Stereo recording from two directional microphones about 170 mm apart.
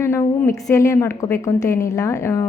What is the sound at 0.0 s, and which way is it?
A woman's voice, 15° left (ahead or behind).